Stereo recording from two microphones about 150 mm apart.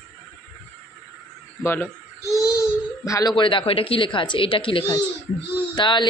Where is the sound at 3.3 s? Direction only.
35° left (ahead or behind).